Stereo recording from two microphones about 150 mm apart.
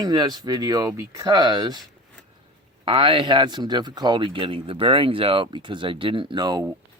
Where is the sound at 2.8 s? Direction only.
30° right (ahead or behind).